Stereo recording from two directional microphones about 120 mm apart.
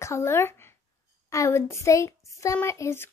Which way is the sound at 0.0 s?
20° left (ahead or behind).